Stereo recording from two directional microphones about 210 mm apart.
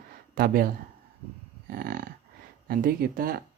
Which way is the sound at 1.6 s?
40° right (ahead or behind).